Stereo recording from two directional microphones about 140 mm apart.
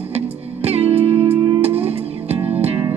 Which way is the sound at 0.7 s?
45° right (ahead or behind).